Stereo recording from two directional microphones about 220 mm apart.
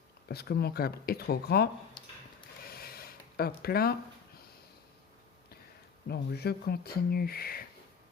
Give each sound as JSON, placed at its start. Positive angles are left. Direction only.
{"t": 0.3, "sound": "speech", "side_deg": 45}
{"t": 2.6, "sound": "a sound", "side_deg": 45}
{"t": 6.1, "sound": "speech", "side_deg": 45}